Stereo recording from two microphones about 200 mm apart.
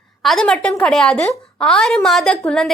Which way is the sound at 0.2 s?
Centre (ahead or behind).